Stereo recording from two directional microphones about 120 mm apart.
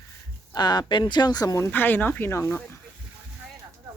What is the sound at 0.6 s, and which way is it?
Speech, 35° left (ahead or behind).